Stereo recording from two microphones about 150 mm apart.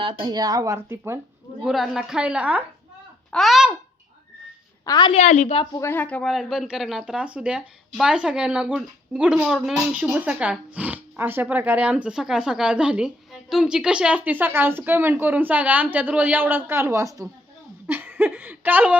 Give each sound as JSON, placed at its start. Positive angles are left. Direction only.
{"t": 0.0, "sound": "speech", "side_deg": -30}
{"t": 1.6, "sound": "a woman's voice", "side_deg": 0}
{"t": 4.9, "sound": "a woman's voice", "side_deg": 30}
{"t": 5.1, "sound": "a woman's voice", "side_deg": 50}
{"t": 5.8, "sound": "speech", "side_deg": 15}